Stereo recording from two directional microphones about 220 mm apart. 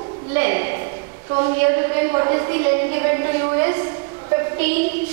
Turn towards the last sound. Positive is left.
turn(degrees=-10)  # may be behind; listen again after turning